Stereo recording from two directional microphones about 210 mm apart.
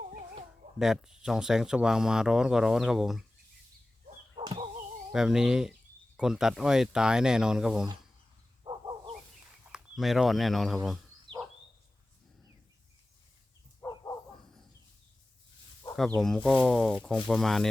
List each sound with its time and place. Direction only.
0.1 s chicken: 35° right (ahead or behind)
0.8 s speech: centre (ahead or behind)
4.4 s a sound: 20° right (ahead or behind)
5.1 s speech: 5° right (ahead or behind)
8.6 s bow-wow: 25° right (ahead or behind)
9.7 s speech: centre (ahead or behind)
11.3 s dog: 25° right (ahead or behind)
16.0 s speech: 5° left (ahead or behind)